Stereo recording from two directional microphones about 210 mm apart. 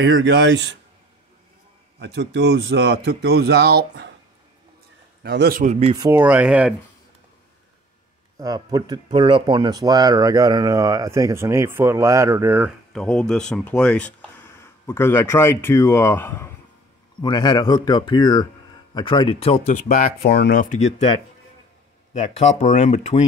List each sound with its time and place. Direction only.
0.0 s speech: 55° right (ahead or behind)
2.0 s speech: 55° right (ahead or behind)
5.2 s a man's voice: 50° right (ahead or behind); by 5.9 s 30° right (ahead or behind)
5.9 s speech: 10° right (ahead or behind)
8.4 s speech: 15° right (ahead or behind)
12.9 s speech: 5° left (ahead or behind); by 19.8 s 30° left (ahead or behind)
20.2 s speech: 50° left (ahead or behind)
22.1 s speech: 35° left (ahead or behind)